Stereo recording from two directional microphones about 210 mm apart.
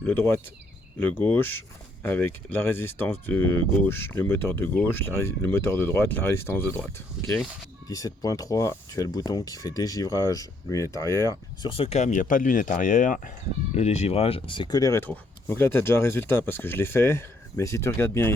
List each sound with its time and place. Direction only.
0.0 s speech: 10° left (ahead or behind)
11.7 s speech: 30° left (ahead or behind); by 18.3 s 10° left (ahead or behind)